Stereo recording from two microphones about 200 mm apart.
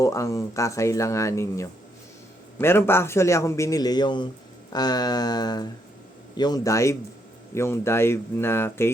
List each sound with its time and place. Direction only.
0.0 s a man's voice: 15° left (ahead or behind)